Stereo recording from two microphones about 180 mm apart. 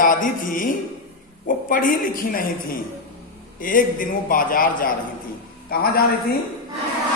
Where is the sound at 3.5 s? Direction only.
50° left (ahead or behind).